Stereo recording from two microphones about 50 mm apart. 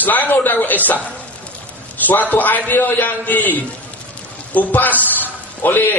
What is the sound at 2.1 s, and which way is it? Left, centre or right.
A man's voice, left.